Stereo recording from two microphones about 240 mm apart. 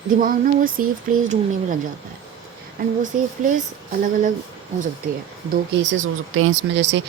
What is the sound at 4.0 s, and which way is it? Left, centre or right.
Speech, right.